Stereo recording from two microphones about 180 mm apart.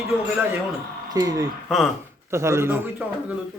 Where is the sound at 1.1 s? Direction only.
20° right (ahead or behind).